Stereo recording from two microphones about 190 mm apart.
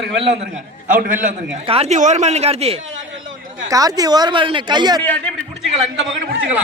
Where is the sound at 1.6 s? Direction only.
35° right (ahead or behind).